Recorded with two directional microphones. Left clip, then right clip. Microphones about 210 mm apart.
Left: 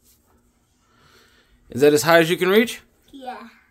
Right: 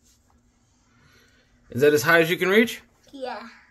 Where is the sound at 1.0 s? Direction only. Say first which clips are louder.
Left 4 dB; 25° left (ahead or behind).